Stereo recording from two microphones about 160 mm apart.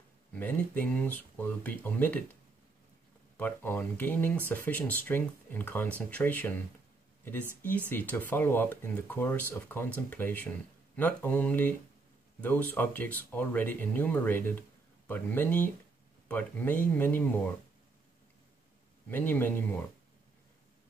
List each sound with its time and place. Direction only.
0.3 s speech: 10° left (ahead or behind)
3.3 s speech: 10° left (ahead or behind)
7.9 s speech: 10° left (ahead or behind)
19.0 s speech: 10° left (ahead or behind)